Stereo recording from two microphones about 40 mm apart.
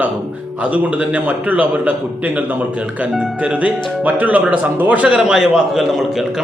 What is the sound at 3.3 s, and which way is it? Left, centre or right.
Speech, right.